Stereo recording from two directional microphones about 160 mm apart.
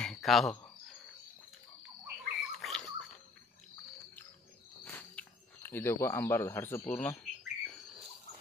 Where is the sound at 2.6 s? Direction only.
5° left (ahead or behind).